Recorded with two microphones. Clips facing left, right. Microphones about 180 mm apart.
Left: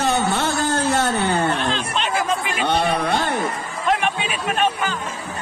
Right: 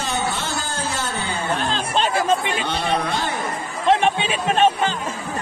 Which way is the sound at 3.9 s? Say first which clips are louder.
Right 4 dB; 30° right (ahead or behind).